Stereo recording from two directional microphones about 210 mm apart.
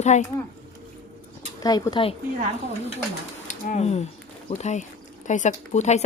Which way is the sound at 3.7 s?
30° left (ahead or behind).